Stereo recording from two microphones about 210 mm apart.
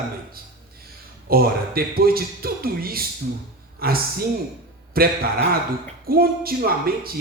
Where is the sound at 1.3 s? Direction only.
45° right (ahead or behind).